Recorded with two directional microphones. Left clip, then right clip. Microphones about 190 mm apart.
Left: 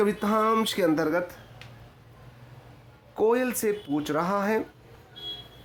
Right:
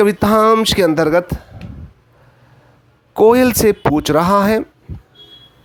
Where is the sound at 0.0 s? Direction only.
35° right (ahead or behind).